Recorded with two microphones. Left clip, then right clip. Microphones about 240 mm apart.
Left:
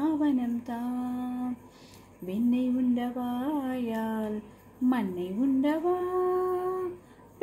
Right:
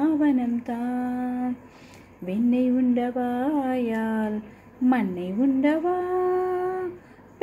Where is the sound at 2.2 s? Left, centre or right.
Centre.